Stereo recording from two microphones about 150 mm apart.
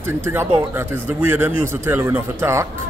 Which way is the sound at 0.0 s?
15° right (ahead or behind).